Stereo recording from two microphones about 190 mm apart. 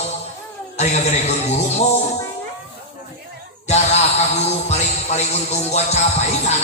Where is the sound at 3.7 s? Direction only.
35° left (ahead or behind).